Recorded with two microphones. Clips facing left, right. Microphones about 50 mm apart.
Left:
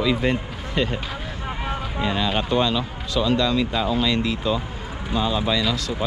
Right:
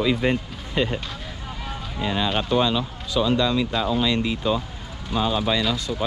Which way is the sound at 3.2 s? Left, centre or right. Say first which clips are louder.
Even; right.